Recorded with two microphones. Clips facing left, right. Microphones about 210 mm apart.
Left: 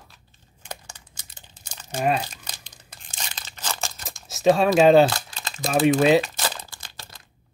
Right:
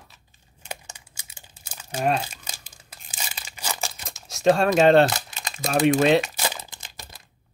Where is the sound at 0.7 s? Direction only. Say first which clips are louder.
Right 1 dB; 10° right (ahead or behind).